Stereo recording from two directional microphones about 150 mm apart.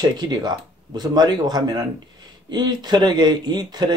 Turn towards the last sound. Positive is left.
turn(degrees=-30)  # may be behind; listen again after turning